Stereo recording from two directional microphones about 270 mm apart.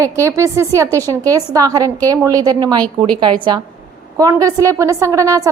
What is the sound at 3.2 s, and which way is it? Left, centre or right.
A woman's voice, centre.